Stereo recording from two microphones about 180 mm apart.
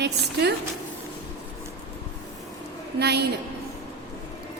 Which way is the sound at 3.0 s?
65° right (ahead or behind).